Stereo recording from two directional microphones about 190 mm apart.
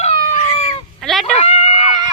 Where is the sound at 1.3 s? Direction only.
35° left (ahead or behind).